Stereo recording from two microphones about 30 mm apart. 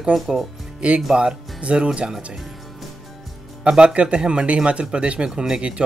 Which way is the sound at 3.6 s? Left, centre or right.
Right.